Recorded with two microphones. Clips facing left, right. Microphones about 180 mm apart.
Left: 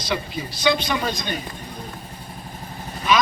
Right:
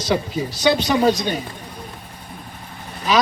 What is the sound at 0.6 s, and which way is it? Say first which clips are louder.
Speech: right 5 dB; 40° right (ahead or behind).